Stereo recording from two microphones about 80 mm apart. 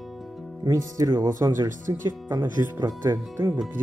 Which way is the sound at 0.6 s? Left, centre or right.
Right.